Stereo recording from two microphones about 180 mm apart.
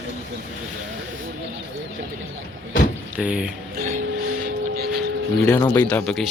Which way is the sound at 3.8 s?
50° right (ahead or behind).